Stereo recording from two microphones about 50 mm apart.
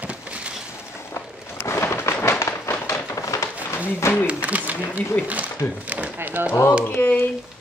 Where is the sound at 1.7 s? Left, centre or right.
Left.